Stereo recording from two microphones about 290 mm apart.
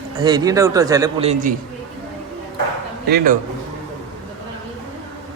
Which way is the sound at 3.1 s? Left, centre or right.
Right.